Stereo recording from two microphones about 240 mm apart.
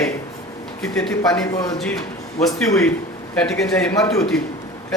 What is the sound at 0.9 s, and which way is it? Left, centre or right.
Speech, centre.